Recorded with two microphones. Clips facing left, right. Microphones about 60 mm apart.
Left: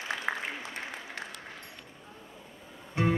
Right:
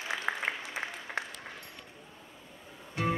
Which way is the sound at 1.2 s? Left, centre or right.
Right.